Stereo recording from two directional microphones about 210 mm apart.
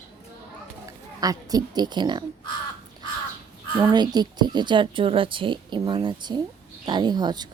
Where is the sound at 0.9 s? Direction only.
15° right (ahead or behind).